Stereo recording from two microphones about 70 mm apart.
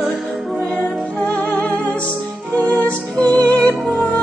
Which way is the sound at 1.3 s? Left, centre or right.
Left.